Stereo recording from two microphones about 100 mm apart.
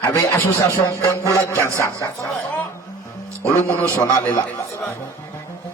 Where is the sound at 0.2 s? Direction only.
20° left (ahead or behind).